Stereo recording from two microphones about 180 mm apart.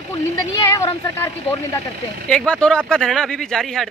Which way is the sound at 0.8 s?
15° left (ahead or behind).